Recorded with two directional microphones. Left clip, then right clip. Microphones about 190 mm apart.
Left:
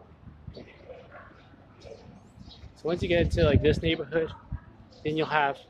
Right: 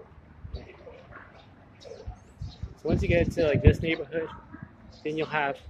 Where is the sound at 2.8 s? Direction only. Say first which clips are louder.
Even; 10° left (ahead or behind).